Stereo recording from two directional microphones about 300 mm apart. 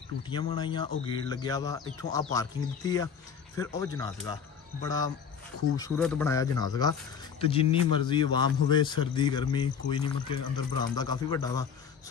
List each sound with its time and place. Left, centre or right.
0.3 s speech: centre